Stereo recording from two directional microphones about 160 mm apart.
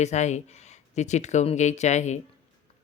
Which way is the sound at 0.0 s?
45° left (ahead or behind).